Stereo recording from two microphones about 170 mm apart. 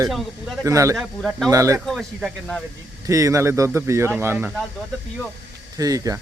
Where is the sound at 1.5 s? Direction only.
20° right (ahead or behind).